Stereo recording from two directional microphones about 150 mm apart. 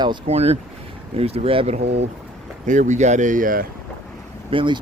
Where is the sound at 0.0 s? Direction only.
30° right (ahead or behind).